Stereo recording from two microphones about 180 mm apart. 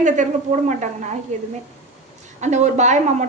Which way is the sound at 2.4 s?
40° right (ahead or behind).